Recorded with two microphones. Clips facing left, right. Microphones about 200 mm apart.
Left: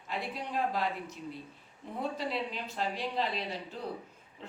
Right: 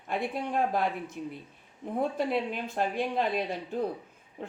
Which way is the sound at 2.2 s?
50° right (ahead or behind).